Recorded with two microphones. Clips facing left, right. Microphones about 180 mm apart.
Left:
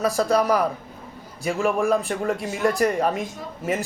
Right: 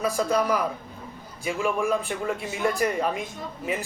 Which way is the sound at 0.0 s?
40° left (ahead or behind).